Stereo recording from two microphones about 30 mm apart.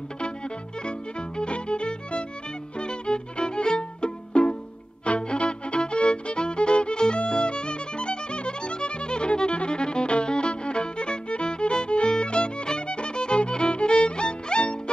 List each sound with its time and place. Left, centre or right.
0.8 s music: left
2.8 s violin: left
5.0 s music: left